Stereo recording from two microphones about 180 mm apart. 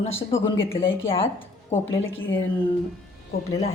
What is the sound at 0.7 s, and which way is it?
Speech, 90° left.